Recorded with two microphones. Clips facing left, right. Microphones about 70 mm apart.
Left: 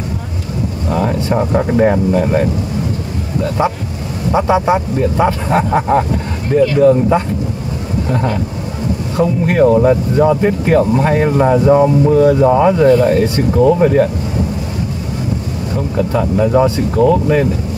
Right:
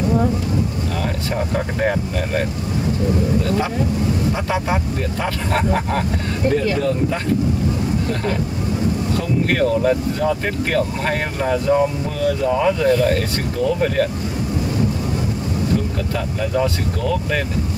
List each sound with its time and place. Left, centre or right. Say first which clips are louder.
6.5 s speech: left 12 dB; left
9.1 s speech: left 10 dB; left
16.3 s speech: left 8 dB; left